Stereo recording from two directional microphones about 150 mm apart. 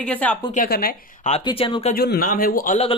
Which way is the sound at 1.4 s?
35° left (ahead or behind).